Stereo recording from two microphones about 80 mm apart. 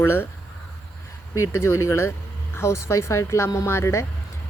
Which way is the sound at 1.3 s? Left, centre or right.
Left.